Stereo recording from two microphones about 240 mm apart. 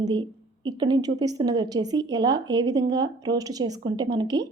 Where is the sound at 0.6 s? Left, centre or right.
Centre.